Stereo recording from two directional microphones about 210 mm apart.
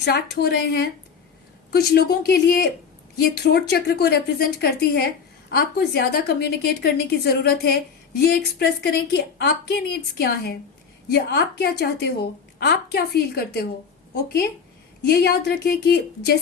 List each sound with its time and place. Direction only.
0.0 s a woman's voice: 50° left (ahead or behind)
15.0 s a woman's voice: 50° left (ahead or behind)